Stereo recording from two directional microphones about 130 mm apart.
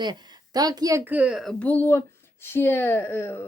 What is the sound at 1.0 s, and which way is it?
Speech, 10° right (ahead or behind).